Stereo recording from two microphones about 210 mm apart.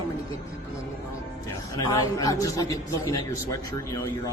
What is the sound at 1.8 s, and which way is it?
Speech, 15° left (ahead or behind).